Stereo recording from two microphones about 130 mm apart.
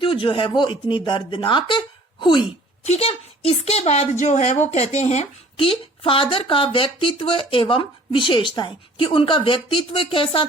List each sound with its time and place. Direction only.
0.0 s speech: 40° left (ahead or behind)
2.8 s a woman's voice: 55° left (ahead or behind)